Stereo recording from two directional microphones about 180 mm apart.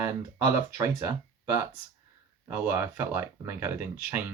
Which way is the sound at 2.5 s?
10° right (ahead or behind).